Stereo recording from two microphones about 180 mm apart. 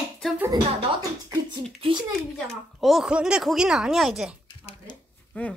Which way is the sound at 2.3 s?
Centre (ahead or behind).